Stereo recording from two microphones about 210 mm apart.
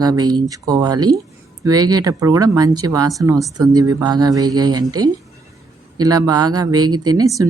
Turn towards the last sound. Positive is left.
turn(degrees=-15)  # may be behind; listen again after turning